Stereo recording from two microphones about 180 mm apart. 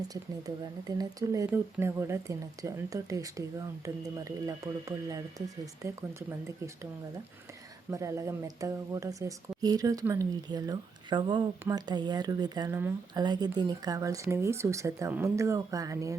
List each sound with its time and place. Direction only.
0.1 s speech: 20° right (ahead or behind)
7.9 s speech: 15° right (ahead or behind)